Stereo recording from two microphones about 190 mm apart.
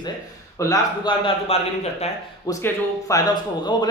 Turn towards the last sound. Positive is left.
turn(degrees=20)  # may be behind; listen again after turning